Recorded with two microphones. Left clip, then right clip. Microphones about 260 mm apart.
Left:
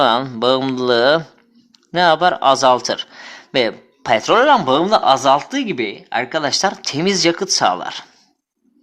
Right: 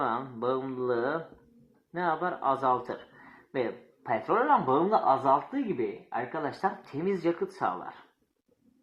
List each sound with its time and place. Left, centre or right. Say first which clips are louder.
0.0 s speech: left 15 dB; left
6.6 s speech: left 13 dB; left
7.0 s speech: left 13 dB; left